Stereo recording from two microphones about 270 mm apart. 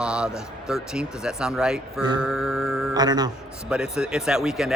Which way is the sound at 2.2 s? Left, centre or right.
Centre.